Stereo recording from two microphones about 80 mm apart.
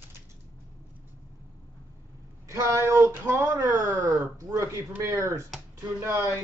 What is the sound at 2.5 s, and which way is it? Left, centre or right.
Speech, right.